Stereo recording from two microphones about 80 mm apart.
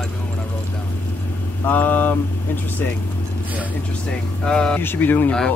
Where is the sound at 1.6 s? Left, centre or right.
Left.